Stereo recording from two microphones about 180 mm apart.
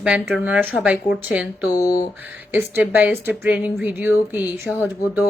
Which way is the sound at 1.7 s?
20° left (ahead or behind).